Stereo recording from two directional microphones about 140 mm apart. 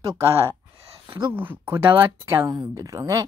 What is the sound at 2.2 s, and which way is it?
A woman's voice, 25° right (ahead or behind).